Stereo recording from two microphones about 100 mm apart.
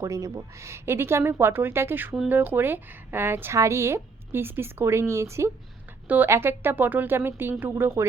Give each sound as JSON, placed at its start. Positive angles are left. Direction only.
{"t": 0.0, "sound": "speech", "side_deg": -30}